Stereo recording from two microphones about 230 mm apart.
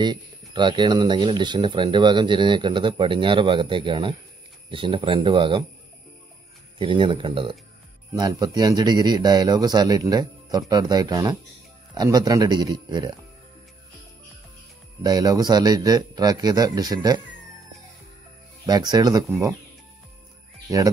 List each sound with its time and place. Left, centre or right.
0.0 s speech: centre
6.8 s speech: right
15.0 s speech: centre
18.7 s speech: centre